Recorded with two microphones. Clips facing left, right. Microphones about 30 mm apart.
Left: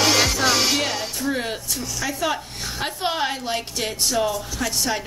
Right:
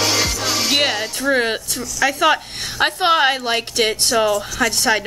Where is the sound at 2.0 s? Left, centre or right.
Right.